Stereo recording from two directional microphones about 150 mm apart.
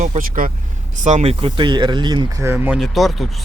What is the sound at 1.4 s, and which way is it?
Speech, 30° right (ahead or behind).